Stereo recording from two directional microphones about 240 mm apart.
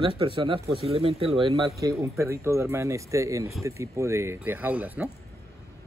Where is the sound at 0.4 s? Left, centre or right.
Right.